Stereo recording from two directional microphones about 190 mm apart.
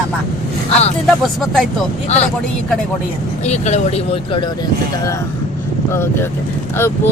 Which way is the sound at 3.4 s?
35° left (ahead or behind).